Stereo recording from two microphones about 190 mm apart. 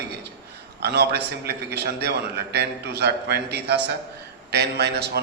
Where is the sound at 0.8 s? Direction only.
60° right (ahead or behind).